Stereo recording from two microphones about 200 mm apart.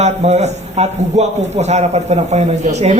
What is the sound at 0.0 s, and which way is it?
Speech, 35° right (ahead or behind).